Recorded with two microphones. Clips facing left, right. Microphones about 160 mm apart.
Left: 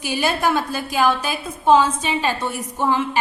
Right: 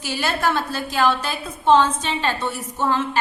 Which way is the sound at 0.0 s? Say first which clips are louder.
Left 2 dB; 15° left (ahead or behind).